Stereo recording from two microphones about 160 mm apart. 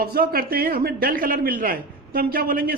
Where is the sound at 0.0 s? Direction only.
75° right (ahead or behind).